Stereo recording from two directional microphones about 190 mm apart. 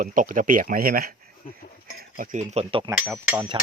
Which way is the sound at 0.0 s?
45° right (ahead or behind).